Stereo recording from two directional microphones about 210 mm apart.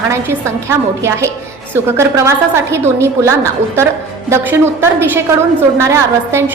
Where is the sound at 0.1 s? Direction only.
15° right (ahead or behind).